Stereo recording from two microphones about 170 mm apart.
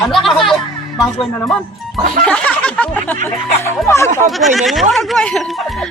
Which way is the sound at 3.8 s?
15° left (ahead or behind).